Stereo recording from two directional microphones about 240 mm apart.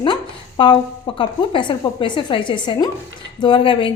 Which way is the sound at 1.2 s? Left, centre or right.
Left.